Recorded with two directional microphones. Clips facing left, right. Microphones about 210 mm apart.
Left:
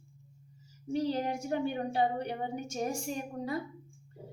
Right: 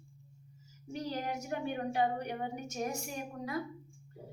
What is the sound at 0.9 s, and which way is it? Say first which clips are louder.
A woman's voice: left 6 dB; 30° left (ahead or behind).